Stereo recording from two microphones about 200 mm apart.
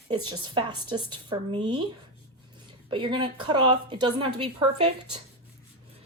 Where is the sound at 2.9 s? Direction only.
25° right (ahead or behind).